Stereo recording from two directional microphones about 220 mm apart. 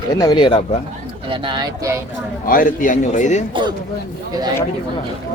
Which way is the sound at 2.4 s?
40° left (ahead or behind).